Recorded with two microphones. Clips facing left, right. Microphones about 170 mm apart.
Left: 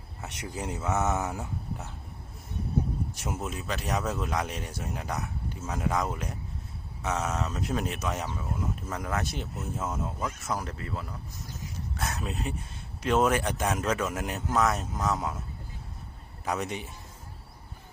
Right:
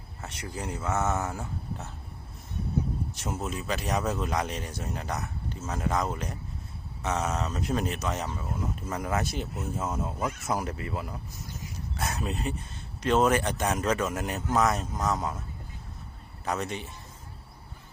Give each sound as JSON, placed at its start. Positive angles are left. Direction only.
{"t": 0.2, "sound": "speech", "side_deg": 15}
{"t": 3.2, "sound": "speech", "side_deg": 5}
{"t": 8.9, "sound": "speech", "side_deg": -5}
{"t": 11.9, "sound": "speech", "side_deg": 0}
{"t": 16.5, "sound": "speech", "side_deg": 15}